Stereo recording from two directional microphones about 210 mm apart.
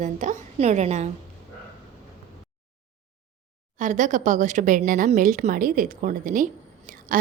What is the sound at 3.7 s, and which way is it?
A woman's voice, 35° right (ahead or behind).